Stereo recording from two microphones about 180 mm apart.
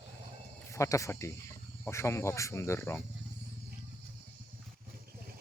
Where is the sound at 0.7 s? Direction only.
15° left (ahead or behind).